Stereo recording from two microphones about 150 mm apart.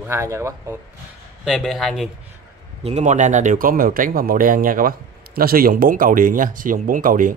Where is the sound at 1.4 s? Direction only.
Centre (ahead or behind).